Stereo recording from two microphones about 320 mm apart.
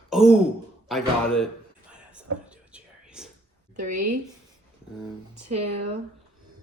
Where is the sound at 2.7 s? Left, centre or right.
Centre.